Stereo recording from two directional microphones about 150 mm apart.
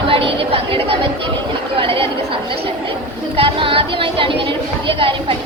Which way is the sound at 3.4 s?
35° right (ahead or behind).